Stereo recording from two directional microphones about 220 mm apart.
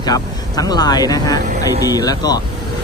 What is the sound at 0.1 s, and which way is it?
Speech, 15° left (ahead or behind).